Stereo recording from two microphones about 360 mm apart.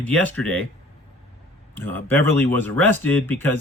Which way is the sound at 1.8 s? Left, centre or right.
Centre.